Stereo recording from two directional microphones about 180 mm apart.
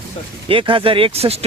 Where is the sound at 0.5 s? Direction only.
30° right (ahead or behind).